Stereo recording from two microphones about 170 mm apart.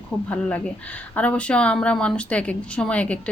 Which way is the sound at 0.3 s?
5° left (ahead or behind).